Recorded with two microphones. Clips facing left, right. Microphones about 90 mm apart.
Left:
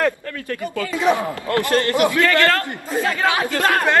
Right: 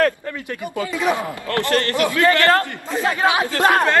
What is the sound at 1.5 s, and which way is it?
Speech, 20° left (ahead or behind).